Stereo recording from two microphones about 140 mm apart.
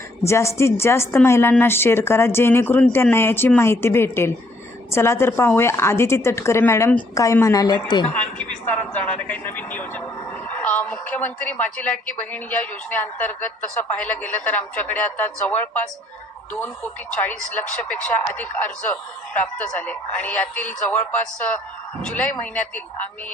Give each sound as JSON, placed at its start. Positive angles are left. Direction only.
{"t": 0.3, "sound": "a woman's voice", "side_deg": 20}
{"t": 8.1, "sound": "a woman's voice", "side_deg": 10}